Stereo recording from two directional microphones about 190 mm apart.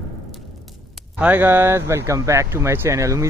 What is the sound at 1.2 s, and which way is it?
Speech, 10° right (ahead or behind).